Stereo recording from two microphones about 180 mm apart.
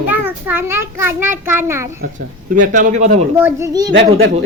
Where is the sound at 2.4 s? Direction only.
45° right (ahead or behind).